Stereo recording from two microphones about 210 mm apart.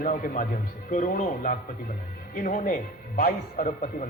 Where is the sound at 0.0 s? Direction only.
40° left (ahead or behind).